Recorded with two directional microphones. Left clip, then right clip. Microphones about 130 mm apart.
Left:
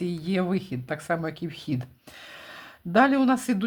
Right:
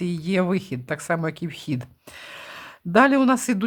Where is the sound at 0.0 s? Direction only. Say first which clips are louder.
Right 4 dB; 40° right (ahead or behind).